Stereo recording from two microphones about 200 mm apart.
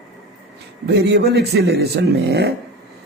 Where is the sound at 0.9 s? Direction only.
55° right (ahead or behind).